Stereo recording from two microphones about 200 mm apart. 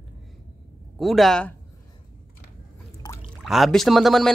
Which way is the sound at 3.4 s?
Centre (ahead or behind).